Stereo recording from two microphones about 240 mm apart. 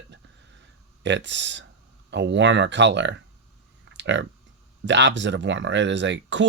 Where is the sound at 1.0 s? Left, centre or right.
Right.